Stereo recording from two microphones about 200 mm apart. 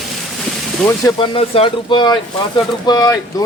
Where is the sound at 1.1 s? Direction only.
25° left (ahead or behind).